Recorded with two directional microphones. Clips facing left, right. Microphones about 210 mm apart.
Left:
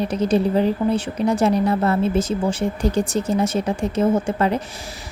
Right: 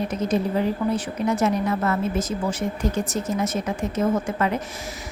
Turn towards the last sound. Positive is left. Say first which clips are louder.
# left 4 dB
turn(degrees=30)  # may be behind; listen again after turning